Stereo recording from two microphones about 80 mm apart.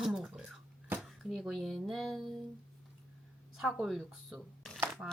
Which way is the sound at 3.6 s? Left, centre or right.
Centre.